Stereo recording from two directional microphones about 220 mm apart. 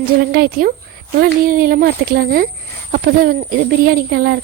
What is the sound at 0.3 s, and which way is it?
Speech, 40° right (ahead or behind).